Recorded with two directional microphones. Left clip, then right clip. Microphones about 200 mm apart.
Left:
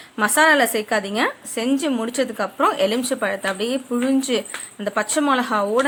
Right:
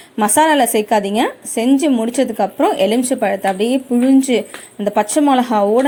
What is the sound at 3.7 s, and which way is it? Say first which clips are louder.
Speech: right 7 dB; 30° left (ahead or behind).